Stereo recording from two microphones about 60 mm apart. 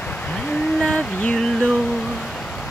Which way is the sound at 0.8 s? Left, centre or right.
Centre.